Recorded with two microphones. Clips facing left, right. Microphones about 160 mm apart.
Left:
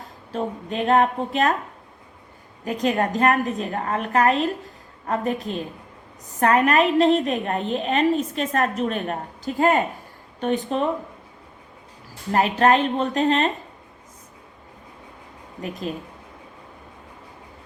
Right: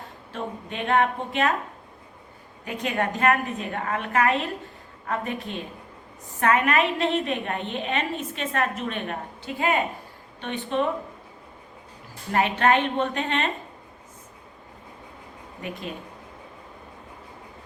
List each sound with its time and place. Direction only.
0.3 s a woman's voice: 35° left (ahead or behind)
2.6 s a woman's voice: 35° left (ahead or behind)
12.3 s a woman's voice: 35° left (ahead or behind)